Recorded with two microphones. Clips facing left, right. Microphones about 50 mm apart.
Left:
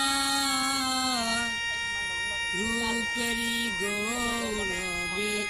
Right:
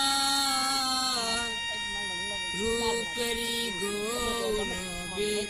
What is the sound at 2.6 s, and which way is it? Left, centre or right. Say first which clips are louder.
Speech: right 4 dB; left.